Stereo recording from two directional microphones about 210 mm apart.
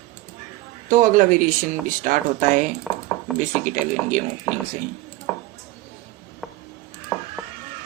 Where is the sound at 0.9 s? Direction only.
40° right (ahead or behind).